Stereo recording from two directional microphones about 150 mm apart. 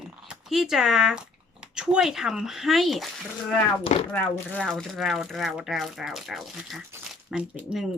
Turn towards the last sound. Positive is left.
turn(degrees=-5)  # may be behind; listen again after turning